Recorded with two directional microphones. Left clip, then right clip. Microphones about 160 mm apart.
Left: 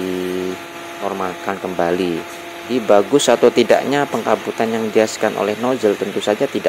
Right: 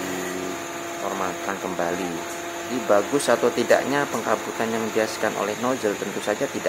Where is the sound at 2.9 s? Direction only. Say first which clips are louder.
Left 7 dB; 45° left (ahead or behind).